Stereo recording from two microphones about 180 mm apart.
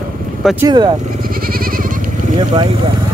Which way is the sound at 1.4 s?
55° right (ahead or behind).